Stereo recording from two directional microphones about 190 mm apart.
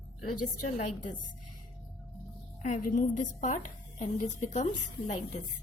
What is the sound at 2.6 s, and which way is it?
Speech, 45° left (ahead or behind).